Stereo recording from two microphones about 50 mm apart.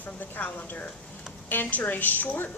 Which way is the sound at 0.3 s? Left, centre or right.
Left.